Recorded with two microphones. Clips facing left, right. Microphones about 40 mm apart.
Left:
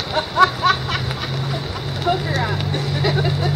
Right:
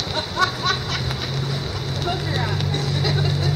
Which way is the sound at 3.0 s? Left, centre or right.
Centre.